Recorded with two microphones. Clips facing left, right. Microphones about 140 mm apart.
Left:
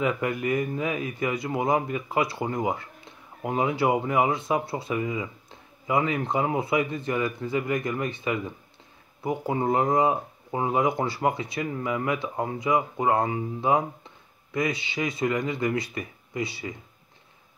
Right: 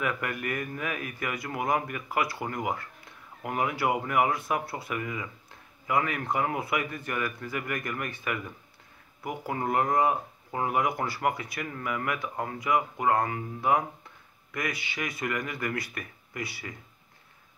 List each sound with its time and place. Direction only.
0.0 s speech: 20° left (ahead or behind)